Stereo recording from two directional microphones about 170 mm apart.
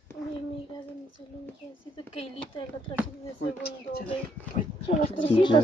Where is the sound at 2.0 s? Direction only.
30° left (ahead or behind).